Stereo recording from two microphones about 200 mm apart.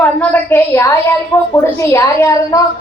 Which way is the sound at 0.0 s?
10° left (ahead or behind).